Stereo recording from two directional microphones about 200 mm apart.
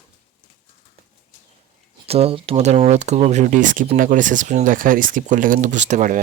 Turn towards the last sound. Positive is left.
turn(degrees=-40)  # may be behind; listen again after turning